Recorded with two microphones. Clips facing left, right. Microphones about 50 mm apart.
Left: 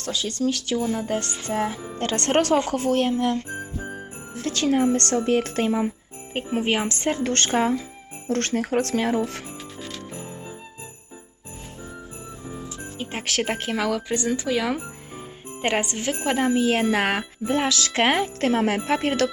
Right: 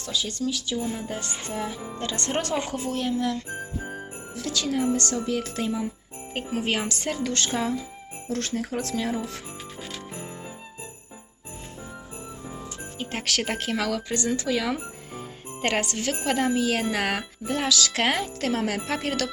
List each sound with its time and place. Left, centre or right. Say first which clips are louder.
0.0 s speech: left 4 dB; left
6.3 s a woman's voice: left 4 dB; left
8.3 s speech: left 6 dB; left
13.0 s speech: left 2 dB; centre; by 19.3 s left